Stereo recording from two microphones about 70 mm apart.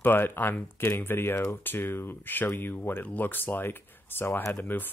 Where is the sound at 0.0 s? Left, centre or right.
Left.